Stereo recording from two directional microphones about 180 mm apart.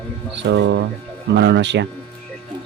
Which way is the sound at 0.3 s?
85° right.